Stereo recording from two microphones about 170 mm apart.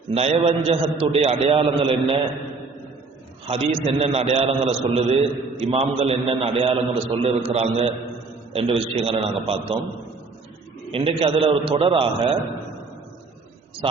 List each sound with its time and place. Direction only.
0.1 s a man's voice: 35° right (ahead or behind)
3.4 s a man's voice: 35° right (ahead or behind)
10.9 s a man's voice: 30° right (ahead or behind)